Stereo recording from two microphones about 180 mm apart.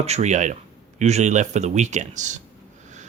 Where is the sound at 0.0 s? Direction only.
35° right (ahead or behind).